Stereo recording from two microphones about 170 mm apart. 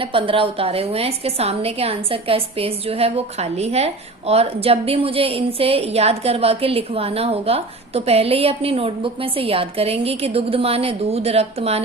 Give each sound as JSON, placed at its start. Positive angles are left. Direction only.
{"t": 0.0, "sound": "a woman's voice", "side_deg": -30}